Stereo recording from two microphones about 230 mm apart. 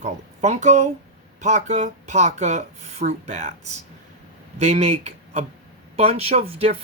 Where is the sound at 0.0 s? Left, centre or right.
Right.